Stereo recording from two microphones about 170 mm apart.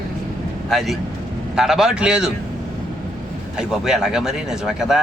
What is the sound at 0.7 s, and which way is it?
Speech, centre (ahead or behind).